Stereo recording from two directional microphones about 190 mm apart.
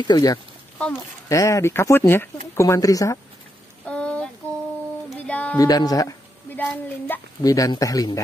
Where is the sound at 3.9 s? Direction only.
5° left (ahead or behind).